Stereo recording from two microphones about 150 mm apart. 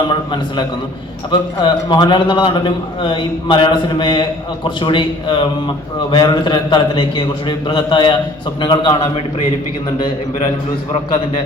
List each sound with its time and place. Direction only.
0.1 s a man's voice: 30° left (ahead or behind)